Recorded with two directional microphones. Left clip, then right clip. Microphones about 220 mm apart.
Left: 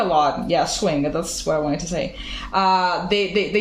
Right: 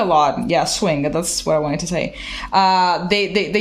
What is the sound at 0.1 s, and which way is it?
Speech, 50° right (ahead or behind).